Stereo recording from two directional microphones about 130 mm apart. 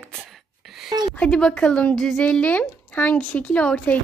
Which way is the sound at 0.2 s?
Centre (ahead or behind).